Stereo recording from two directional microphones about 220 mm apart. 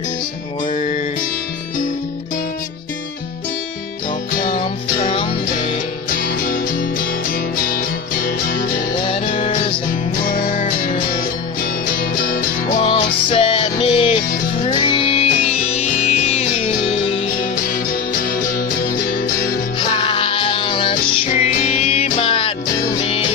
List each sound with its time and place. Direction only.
0.7 s music: 35° left (ahead or behind)
4.4 s music: 40° left (ahead or behind)
9.0 s music: 25° left (ahead or behind)
9.3 s music: 35° left (ahead or behind)
17.8 s music: 40° left (ahead or behind)
19.8 s music: 25° left (ahead or behind)
21.3 s music: 35° left (ahead or behind)